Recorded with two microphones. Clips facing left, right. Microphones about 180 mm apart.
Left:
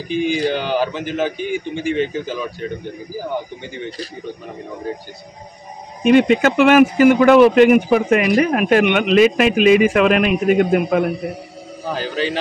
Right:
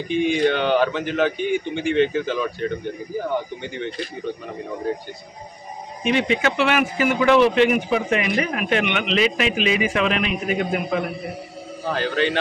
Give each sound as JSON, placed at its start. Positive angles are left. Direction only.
{"t": 0.1, "sound": "a man's voice", "side_deg": 0}
{"t": 6.0, "sound": "speech", "side_deg": 45}
{"t": 11.9, "sound": "a man's voice", "side_deg": 5}